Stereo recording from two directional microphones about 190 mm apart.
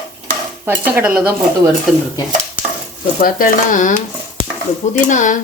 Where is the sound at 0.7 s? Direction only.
10° right (ahead or behind).